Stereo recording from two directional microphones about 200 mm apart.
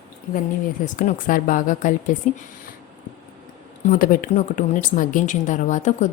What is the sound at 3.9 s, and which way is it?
A woman's voice, 40° left (ahead or behind).